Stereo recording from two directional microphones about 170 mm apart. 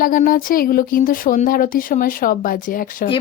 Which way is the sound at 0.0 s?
55° left (ahead or behind).